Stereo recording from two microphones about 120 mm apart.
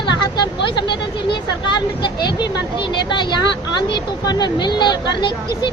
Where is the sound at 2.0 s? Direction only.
40° left (ahead or behind).